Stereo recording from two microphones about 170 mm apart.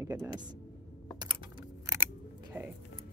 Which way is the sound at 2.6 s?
10° right (ahead or behind).